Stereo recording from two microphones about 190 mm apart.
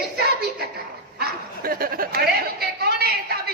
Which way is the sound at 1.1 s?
50° right (ahead or behind).